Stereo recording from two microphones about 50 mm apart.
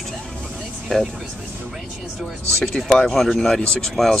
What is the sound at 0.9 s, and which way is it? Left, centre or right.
Speech, centre.